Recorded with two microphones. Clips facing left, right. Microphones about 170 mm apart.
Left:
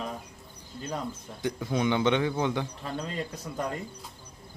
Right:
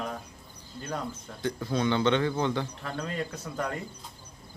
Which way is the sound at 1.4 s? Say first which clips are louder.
Even; 15° left (ahead or behind).